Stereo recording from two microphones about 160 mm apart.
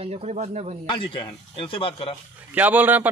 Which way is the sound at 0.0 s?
45° right (ahead or behind).